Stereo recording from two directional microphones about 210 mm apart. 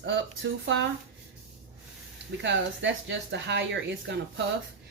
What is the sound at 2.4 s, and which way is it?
Speech, 60° right (ahead or behind).